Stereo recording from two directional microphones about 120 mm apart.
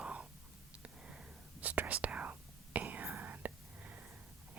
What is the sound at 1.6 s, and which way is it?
Whispering, 15° right (ahead or behind).